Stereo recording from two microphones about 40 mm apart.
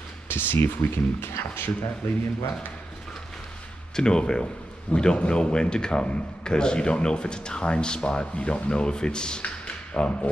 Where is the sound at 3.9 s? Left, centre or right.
Left.